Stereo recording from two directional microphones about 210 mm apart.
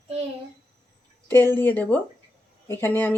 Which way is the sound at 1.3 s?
10° left (ahead or behind).